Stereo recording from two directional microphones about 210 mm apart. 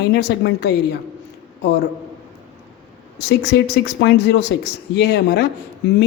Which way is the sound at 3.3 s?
50° left (ahead or behind).